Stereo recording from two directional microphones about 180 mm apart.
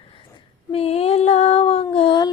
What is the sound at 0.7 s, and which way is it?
Child singing, 35° left (ahead or behind).